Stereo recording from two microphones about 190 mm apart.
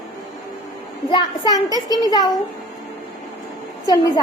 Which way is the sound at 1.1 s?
20° left (ahead or behind).